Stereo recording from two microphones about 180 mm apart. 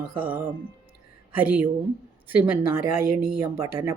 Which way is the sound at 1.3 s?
10° right (ahead or behind).